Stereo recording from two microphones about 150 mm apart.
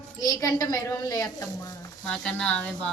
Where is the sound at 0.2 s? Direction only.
20° left (ahead or behind).